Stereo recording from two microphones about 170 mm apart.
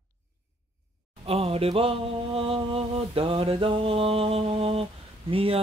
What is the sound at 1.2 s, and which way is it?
Mantra, 35° right (ahead or behind).